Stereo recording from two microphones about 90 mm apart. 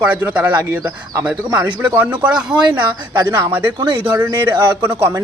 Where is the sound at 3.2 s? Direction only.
25° right (ahead or behind).